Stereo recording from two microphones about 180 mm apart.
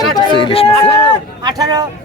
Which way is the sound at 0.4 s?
30° left (ahead or behind).